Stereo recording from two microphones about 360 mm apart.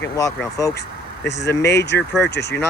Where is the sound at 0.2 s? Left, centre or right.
Centre.